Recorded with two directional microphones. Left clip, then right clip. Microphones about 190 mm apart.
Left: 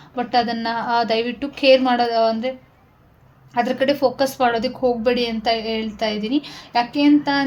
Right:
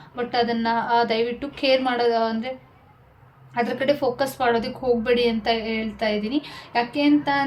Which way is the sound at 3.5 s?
35° left (ahead or behind).